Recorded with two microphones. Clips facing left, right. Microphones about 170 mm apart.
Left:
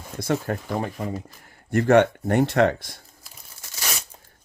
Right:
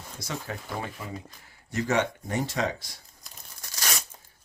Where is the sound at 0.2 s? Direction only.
55° left (ahead or behind).